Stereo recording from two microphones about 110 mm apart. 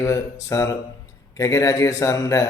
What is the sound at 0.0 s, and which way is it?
A man's voice, 25° left (ahead or behind).